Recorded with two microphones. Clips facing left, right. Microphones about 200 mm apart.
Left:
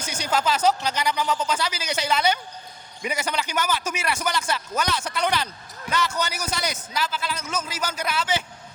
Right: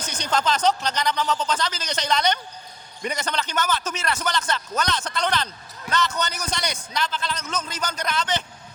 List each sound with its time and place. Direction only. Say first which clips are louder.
0.0 s a man's voice: even; 10° left (ahead or behind)